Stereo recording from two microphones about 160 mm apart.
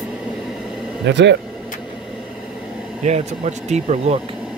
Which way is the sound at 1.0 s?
90° right.